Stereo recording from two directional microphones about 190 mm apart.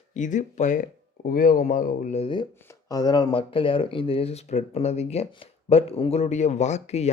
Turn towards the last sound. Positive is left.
turn(degrees=35)  # may be behind; listen again after turning